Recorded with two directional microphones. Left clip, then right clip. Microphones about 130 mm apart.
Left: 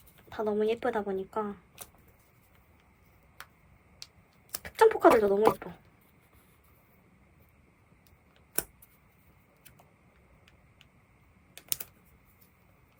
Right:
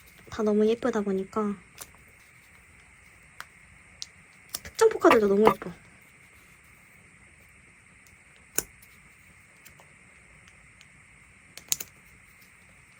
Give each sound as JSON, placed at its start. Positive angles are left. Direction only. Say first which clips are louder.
{"t": 0.3, "sound": "a woman's voice", "louder": "right 5 dB", "side_deg": -20}
{"t": 4.5, "sound": "a sound", "louder": "right 1 dB", "side_deg": -5}
{"t": 11.5, "sound": "typing", "louder": "right 7 dB", "side_deg": -20}